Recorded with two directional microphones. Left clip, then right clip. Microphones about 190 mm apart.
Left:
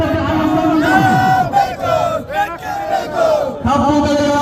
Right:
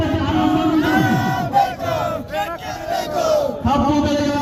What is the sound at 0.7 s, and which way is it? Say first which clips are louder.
Battle cry: left 6 dB; 60° left (ahead or behind).